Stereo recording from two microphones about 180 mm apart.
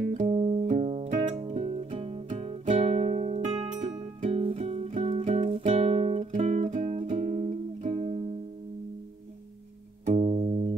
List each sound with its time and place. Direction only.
0.1 s music: 35° right (ahead or behind)
10.0 s music: 35° right (ahead or behind)